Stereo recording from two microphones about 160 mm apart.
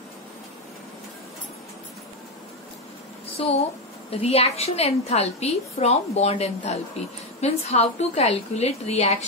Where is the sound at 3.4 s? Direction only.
40° left (ahead or behind).